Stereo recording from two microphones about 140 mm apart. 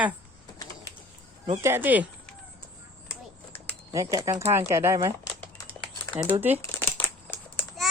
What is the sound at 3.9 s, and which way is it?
Speech, 25° right (ahead or behind).